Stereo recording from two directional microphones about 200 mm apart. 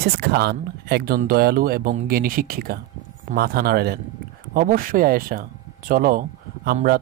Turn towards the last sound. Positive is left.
turn(degrees=-45)  # may be behind; listen again after turning